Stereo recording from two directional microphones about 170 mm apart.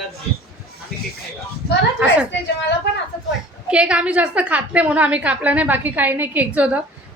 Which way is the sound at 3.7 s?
5° right (ahead or behind).